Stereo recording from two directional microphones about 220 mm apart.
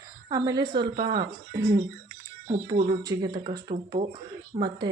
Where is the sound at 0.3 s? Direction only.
15° right (ahead or behind).